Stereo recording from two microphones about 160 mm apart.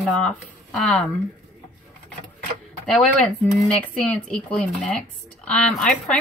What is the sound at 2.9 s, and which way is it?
A woman's voice, 5° left (ahead or behind).